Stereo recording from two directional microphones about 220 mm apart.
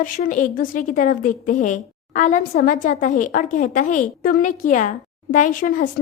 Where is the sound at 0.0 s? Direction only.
35° left (ahead or behind).